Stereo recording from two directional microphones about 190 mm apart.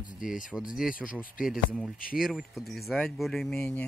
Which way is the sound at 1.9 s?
50° left (ahead or behind).